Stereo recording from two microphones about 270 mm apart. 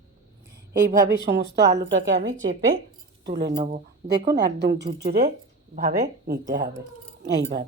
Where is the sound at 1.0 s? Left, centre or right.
Right.